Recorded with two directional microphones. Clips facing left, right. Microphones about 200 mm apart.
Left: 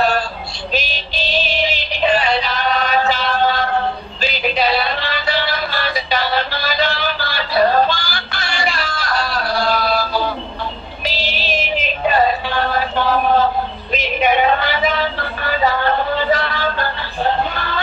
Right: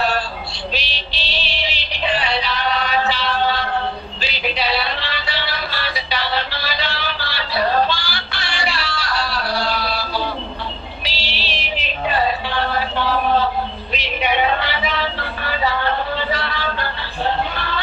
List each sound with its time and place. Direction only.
0.7 s music: 45° left (ahead or behind)
11.1 s synthetic singing: 45° left (ahead or behind)
13.9 s a sound: 45° left (ahead or behind)